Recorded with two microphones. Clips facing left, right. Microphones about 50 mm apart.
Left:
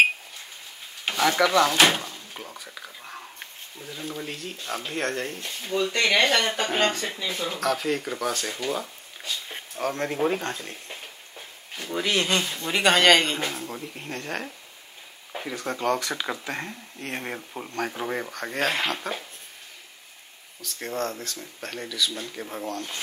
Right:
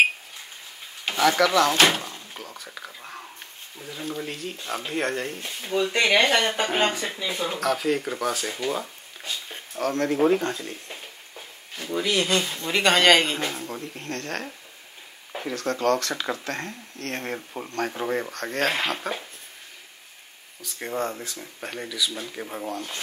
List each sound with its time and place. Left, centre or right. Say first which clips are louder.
1.1 s a sound: even; centre
1.4 s speech: left 1 dB; centre
2.7 s a sound: right 1 dB; centre
4.0 s speech: right 3 dB; centre
9.8 s speech: right 3 dB; centre
10.1 s speech: right 6 dB; centre
12.0 s speech: right 1 dB; left
12.6 s speech: even; centre
15.5 s speech: right 3 dB; centre
20.6 s speech: right 1 dB; centre